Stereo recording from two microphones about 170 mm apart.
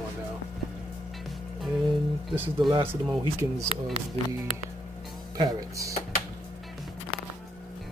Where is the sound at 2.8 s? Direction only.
10° right (ahead or behind).